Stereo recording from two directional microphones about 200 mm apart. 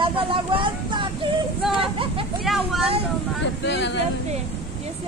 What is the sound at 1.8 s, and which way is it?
Hubbub, 25° right (ahead or behind).